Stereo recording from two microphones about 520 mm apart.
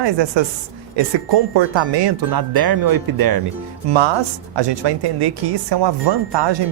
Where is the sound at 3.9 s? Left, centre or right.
Right.